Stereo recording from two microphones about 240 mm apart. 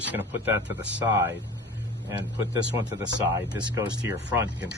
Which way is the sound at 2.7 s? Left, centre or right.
Centre.